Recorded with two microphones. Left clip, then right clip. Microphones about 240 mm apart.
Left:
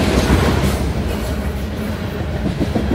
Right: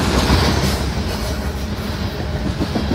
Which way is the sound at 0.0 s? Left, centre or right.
Right.